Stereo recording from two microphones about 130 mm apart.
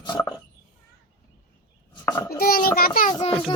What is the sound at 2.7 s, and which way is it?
Speech, 90° left.